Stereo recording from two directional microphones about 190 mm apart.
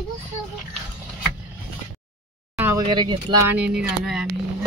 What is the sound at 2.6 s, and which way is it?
Speech, 20° right (ahead or behind).